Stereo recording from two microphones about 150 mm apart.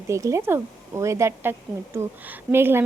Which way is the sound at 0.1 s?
20° right (ahead or behind).